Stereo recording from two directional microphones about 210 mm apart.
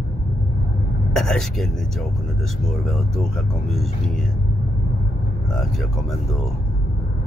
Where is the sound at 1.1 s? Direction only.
Centre (ahead or behind).